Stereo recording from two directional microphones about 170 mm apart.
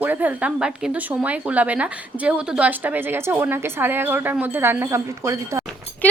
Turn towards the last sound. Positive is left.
turn(degrees=-15)  # may be behind; listen again after turning